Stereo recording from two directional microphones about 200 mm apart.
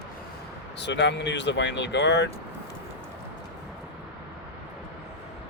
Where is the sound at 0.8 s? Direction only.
60° left (ahead or behind).